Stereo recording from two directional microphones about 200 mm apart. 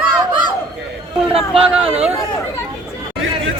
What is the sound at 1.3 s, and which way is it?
Speech, centre (ahead or behind).